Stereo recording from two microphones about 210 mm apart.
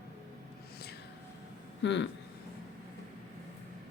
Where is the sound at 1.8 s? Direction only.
60° left (ahead or behind).